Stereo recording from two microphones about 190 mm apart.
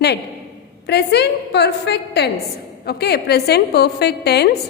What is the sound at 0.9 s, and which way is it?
A woman's voice, 60° left (ahead or behind).